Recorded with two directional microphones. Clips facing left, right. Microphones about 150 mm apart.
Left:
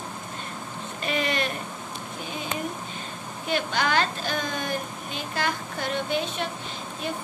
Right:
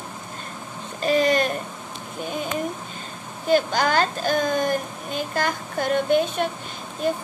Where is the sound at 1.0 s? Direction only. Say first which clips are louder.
Right 8 dB; 40° right (ahead or behind).